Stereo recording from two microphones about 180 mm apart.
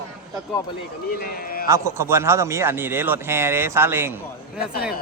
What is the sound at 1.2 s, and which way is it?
Speech, 55° left (ahead or behind).